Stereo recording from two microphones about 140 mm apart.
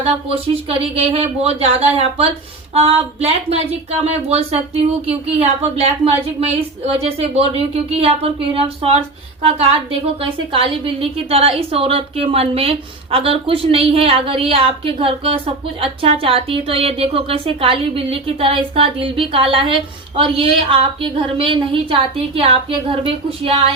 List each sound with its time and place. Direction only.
0.0 s a woman's voice: 45° right (ahead or behind)
6.4 s a woman's voice: 45° right (ahead or behind)